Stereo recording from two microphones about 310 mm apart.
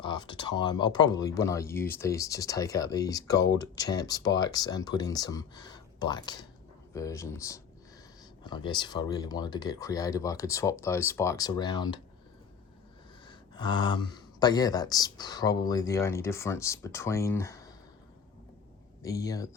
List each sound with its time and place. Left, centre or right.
0.0 s speech: centre
13.2 s speech: centre
19.0 s speech: centre